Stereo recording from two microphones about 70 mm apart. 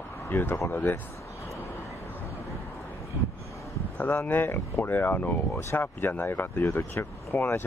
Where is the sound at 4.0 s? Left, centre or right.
Left.